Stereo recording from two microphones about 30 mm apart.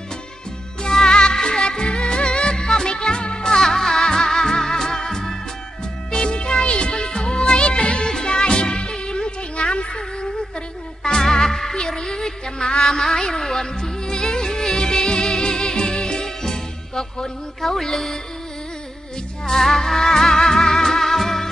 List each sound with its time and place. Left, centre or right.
0.8 s music: left
6.1 s music: left
11.1 s music: centre
12.8 s music: centre
19.4 s music: centre